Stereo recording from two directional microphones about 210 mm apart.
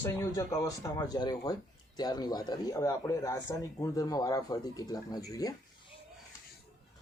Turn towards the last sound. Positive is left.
turn(degrees=15)  # may be behind; listen again after turning